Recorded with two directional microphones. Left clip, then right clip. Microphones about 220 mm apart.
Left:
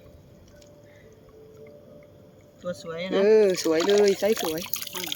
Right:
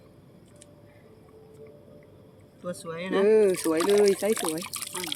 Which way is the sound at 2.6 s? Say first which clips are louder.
Left 3 dB; 10° right (ahead or behind).